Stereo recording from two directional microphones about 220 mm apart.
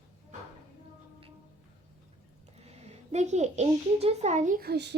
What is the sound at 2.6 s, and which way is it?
A child's voice, 30° right (ahead or behind).